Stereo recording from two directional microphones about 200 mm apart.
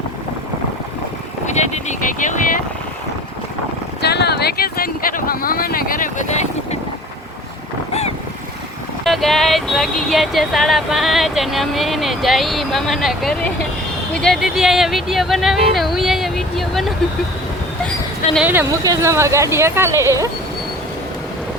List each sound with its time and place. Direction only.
1.5 s speech: 35° left (ahead or behind)
4.0 s speech: 55° left (ahead or behind); by 6.7 s 35° left (ahead or behind)
9.0 s speech: centre (ahead or behind)
18.3 s speech: 10° right (ahead or behind)